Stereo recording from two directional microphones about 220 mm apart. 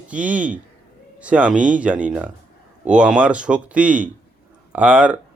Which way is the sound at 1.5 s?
35° right (ahead or behind).